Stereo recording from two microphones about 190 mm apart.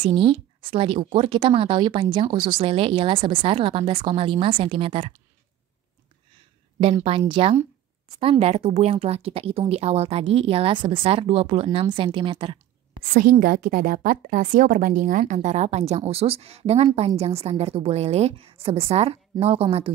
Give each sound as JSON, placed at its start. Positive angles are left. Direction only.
{"t": 0.0, "sound": "speech", "side_deg": -30}
{"t": 6.8, "sound": "a woman's voice", "side_deg": -30}
{"t": 13.1, "sound": "a woman's voice", "side_deg": -50}